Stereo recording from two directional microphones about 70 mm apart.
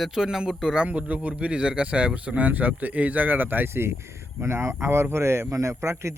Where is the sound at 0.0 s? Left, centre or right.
Centre.